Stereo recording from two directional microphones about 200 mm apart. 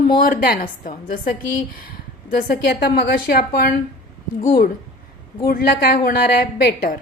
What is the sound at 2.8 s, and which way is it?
Speech, 50° left (ahead or behind).